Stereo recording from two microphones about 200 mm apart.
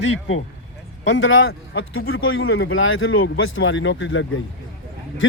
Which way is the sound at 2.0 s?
90° left.